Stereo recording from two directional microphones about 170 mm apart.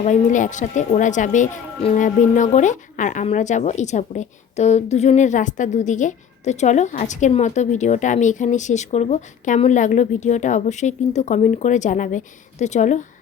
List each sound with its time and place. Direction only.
0.0 s a woman's voice: 45° left (ahead or behind)
1.8 s speech: 35° left (ahead or behind)
2.0 s a woman's voice: 45° left (ahead or behind)